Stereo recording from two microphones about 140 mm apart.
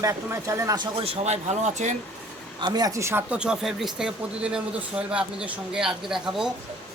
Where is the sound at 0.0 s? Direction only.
20° right (ahead or behind).